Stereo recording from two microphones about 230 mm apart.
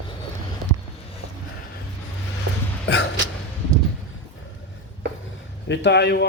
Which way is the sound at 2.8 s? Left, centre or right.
Left.